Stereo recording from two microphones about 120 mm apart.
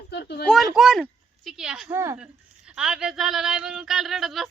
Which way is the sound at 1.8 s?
25° right (ahead or behind).